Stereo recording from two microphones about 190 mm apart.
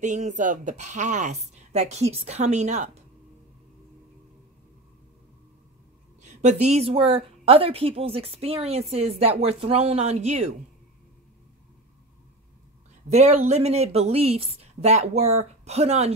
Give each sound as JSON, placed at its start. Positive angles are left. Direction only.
{"t": 0.0, "sound": "a woman's voice", "side_deg": -40}
{"t": 6.2, "sound": "a woman's voice", "side_deg": -35}
{"t": 13.1, "sound": "a woman's voice", "side_deg": -35}